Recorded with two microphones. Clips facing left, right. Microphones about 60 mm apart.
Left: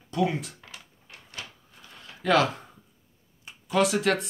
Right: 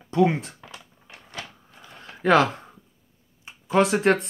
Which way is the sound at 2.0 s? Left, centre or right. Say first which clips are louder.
Right 4 dB; right.